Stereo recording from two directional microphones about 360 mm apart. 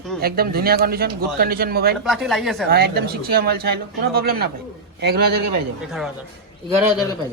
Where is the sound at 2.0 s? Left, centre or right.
Centre.